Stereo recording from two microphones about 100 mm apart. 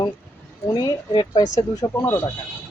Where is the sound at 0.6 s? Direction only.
40° left (ahead or behind).